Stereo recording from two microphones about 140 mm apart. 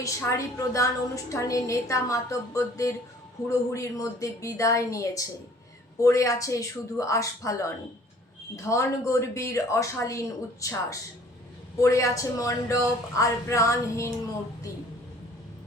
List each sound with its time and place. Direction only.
0.0 s a woman's voice: 20° left (ahead or behind)